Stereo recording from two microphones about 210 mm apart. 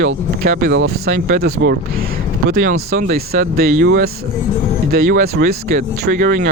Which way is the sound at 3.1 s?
45° right (ahead or behind).